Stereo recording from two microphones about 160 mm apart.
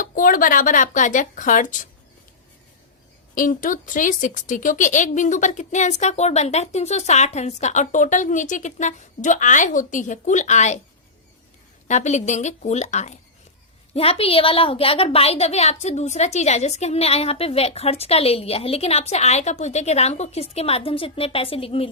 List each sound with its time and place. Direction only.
0.0 s a woman's voice: 60° left (ahead or behind)
3.3 s a woman's voice: 55° left (ahead or behind)
11.9 s a woman's voice: 45° left (ahead or behind)